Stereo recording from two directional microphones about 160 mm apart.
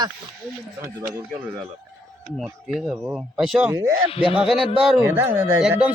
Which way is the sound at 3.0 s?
10° right (ahead or behind).